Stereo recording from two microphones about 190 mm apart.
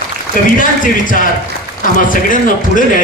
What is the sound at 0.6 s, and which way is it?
A man's voice, 45° left (ahead or behind).